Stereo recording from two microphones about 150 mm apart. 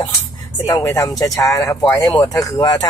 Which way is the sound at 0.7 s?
20° left (ahead or behind).